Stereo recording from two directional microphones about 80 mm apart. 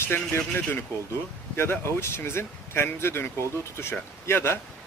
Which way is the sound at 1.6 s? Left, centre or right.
Left.